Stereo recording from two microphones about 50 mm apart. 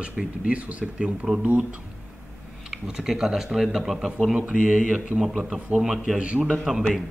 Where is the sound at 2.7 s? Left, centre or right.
Centre.